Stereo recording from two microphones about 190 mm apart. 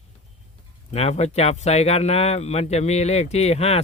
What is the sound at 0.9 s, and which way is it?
Speech, 35° left (ahead or behind).